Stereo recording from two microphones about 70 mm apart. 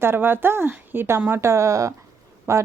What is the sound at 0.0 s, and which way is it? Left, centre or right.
A woman's voice, right.